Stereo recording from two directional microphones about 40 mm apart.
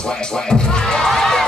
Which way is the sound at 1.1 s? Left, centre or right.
Centre.